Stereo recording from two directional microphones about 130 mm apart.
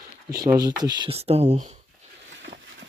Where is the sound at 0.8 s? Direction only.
35° right (ahead or behind).